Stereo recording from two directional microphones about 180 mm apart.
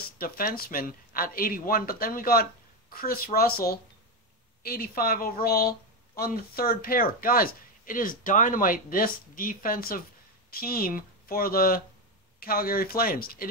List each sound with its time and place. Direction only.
0.2 s a woman's voice: 55° left (ahead or behind)